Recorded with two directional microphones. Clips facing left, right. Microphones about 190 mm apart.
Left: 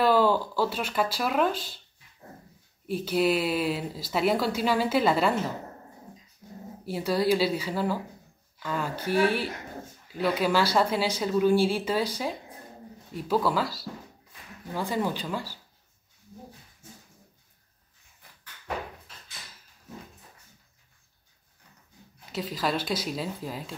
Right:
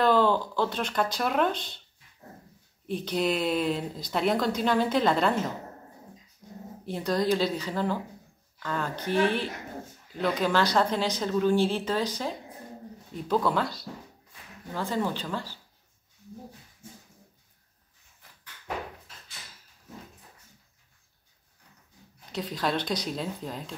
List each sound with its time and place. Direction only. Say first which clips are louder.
0.0 s speech: left 1 dB; 10° left (ahead or behind)
2.9 s a woman's voice: left 3 dB; 5° left (ahead or behind)
6.9 s a woman's voice: left 1 dB; 5° left (ahead or behind)
22.3 s a woman's voice: even; 5° left (ahead or behind)